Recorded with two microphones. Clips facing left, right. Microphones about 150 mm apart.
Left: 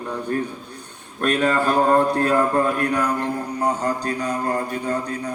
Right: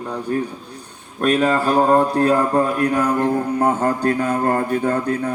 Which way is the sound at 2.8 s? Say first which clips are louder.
Right 4 dB; 45° right (ahead or behind).